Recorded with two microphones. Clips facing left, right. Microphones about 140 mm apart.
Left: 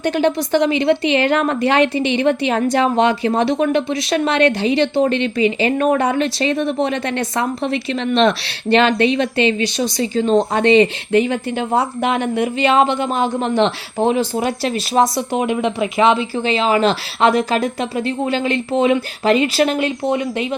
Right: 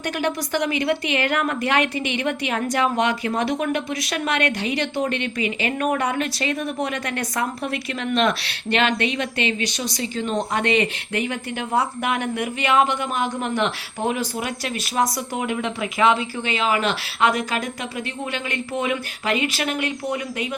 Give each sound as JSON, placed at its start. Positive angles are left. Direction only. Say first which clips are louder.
{"t": 0.0, "sound": "a woman's voice", "louder": "left 8 dB", "side_deg": 30}